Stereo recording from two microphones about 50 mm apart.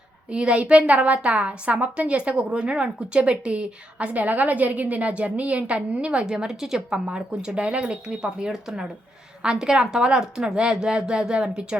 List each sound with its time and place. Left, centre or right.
0.3 s a woman's voice: right